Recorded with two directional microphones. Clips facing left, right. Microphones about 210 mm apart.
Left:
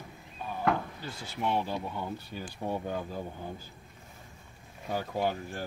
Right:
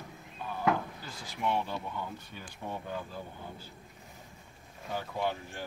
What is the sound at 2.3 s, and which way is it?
Speech, 45° left (ahead or behind).